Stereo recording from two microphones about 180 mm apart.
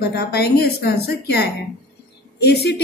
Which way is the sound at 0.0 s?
60° left (ahead or behind).